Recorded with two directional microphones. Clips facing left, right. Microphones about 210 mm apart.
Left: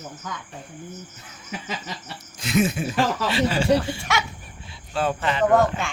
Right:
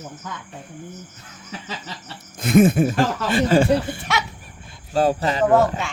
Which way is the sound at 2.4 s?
55° right (ahead or behind).